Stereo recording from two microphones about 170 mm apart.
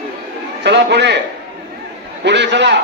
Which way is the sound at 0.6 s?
85° right.